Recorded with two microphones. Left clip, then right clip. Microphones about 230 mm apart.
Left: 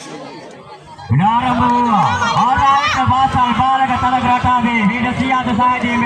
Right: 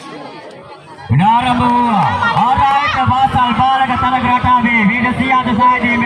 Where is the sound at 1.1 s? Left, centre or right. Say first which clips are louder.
Right 3 dB; right.